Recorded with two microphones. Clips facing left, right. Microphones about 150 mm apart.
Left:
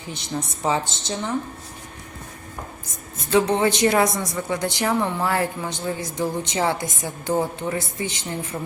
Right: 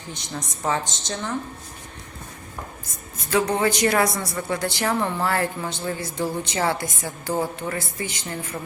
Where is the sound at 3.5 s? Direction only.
20° left (ahead or behind).